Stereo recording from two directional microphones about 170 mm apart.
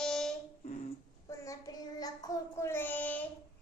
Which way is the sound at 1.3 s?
20° left (ahead or behind).